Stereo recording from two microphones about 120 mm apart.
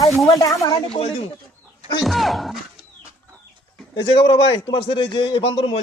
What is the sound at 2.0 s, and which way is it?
Speech, centre (ahead or behind).